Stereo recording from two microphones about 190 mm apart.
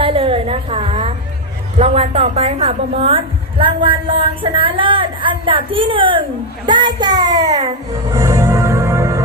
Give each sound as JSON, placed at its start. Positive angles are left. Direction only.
{"t": 0.0, "sound": "a sound", "side_deg": -30}
{"t": 1.8, "sound": "a woman's voice", "side_deg": -35}
{"t": 8.1, "sound": "music", "side_deg": -15}